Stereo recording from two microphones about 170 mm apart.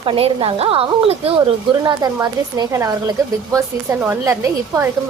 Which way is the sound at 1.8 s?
20° right (ahead or behind).